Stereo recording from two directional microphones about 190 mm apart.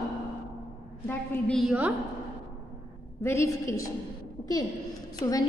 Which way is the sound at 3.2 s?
15° left (ahead or behind).